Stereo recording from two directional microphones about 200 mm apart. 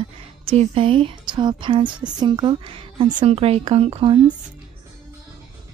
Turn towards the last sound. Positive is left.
turn(degrees=-30)  # may be behind; listen again after turning